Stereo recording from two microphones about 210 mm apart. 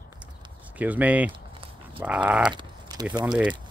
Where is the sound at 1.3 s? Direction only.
25° right (ahead or behind).